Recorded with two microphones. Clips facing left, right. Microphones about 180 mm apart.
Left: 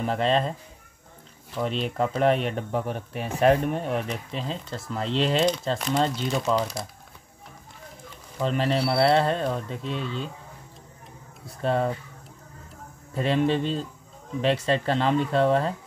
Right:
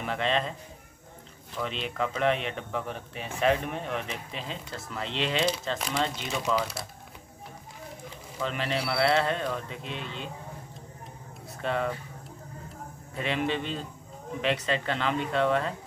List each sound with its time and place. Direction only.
0.0 s speech: 35° left (ahead or behind)
1.6 s speech: 40° left (ahead or behind)
5.8 s speech: centre (ahead or behind)
8.4 s speech: 35° left (ahead or behind)
11.6 s speech: 35° left (ahead or behind)
13.1 s speech: 35° left (ahead or behind)